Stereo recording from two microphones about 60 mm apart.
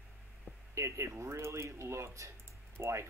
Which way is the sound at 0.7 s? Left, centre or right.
Right.